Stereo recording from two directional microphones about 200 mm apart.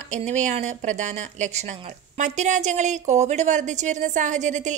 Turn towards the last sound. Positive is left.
turn(degrees=-35)  # may be behind; listen again after turning